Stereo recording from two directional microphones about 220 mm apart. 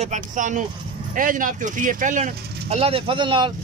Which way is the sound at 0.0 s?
35° right (ahead or behind).